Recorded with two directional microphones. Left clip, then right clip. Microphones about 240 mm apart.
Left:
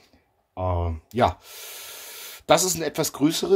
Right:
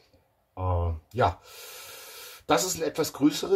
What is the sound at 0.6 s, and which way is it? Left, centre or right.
Speech, left.